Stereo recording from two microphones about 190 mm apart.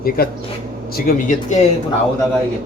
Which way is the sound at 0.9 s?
50° left (ahead or behind).